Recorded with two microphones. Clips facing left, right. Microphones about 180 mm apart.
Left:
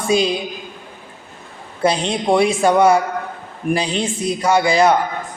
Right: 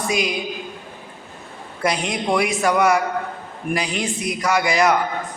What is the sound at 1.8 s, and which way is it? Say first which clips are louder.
A man's voice: left 4 dB; 30° left (ahead or behind).